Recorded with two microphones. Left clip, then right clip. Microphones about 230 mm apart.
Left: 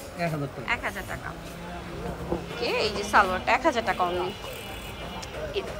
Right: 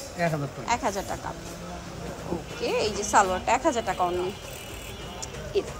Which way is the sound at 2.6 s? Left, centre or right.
Centre.